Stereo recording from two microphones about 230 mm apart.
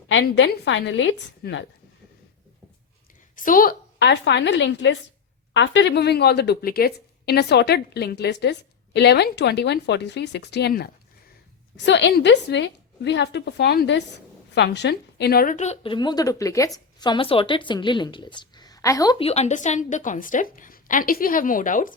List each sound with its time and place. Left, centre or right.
0.1 s a woman's voice: left
3.3 s a woman's voice: left; by 19.1 s centre
19.2 s a woman's voice: left